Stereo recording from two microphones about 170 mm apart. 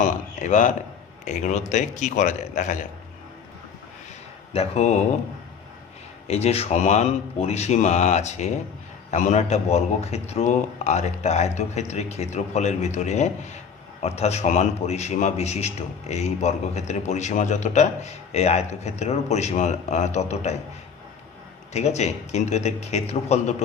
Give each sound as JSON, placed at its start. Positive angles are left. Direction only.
{"t": 0.0, "sound": "a man's voice", "side_deg": 50}
{"t": 4.5, "sound": "a man's voice", "side_deg": 35}
{"t": 6.2, "sound": "a man's voice", "side_deg": 40}
{"t": 21.7, "sound": "a man's voice", "side_deg": 40}